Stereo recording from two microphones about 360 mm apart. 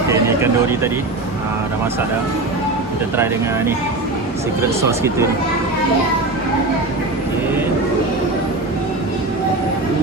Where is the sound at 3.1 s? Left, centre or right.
Centre.